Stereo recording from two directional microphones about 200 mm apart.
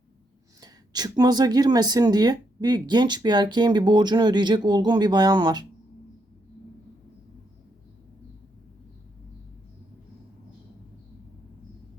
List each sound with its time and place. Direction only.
0.6 s speech: 20° right (ahead or behind)